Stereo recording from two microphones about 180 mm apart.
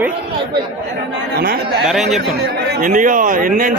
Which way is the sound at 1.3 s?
60° right (ahead or behind).